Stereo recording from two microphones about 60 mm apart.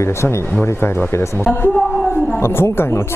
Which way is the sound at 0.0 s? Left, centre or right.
Left.